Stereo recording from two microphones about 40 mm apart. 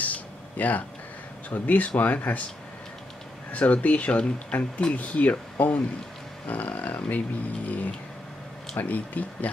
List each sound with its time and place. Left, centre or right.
0.0 s a sound: left
1.5 s speech: left
3.5 s speech: left